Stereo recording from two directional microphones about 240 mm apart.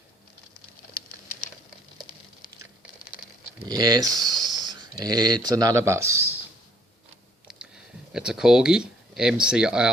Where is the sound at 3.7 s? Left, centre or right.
Centre.